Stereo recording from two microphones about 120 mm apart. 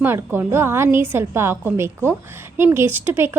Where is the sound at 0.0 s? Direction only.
20° right (ahead or behind).